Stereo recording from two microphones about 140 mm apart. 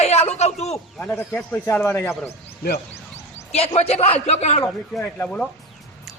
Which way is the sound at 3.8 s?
45° left (ahead or behind).